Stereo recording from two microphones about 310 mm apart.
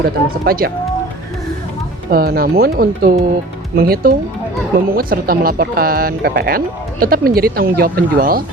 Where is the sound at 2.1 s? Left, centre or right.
Right.